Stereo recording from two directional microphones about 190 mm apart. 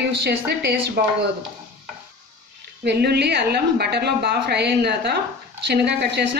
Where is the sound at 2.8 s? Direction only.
60° right (ahead or behind).